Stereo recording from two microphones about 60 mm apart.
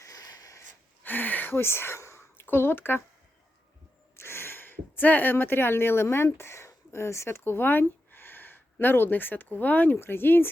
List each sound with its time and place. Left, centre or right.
0.0 s a sound: left
1.0 s gasp: left
2.5 s speech: left
4.2 s speech: left